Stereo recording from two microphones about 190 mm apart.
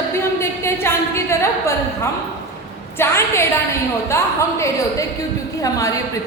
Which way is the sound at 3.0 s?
15° left (ahead or behind).